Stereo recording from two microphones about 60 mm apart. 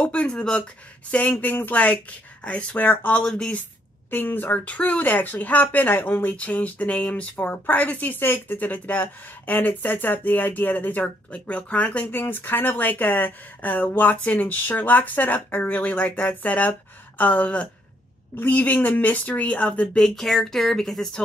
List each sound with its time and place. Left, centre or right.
0.0 s a sound: left
0.3 s speech: centre
1.1 s speech: left
3.2 s speech: centre
4.1 s speech: left
20.2 s speech: centre